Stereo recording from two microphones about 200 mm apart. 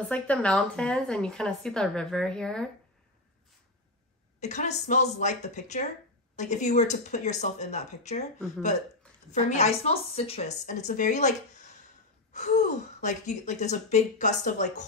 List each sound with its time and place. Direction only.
0.0 s a woman's voice: 5° left (ahead or behind)
4.4 s speech: 35° left (ahead or behind)
9.3 s speech: 35° left (ahead or behind)